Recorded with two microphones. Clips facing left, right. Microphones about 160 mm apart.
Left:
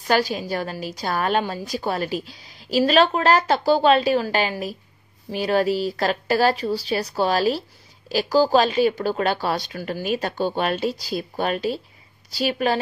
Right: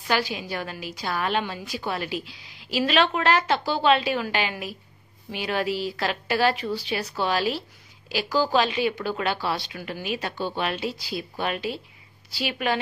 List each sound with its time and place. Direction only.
0.1 s a woman's voice: 40° left (ahead or behind)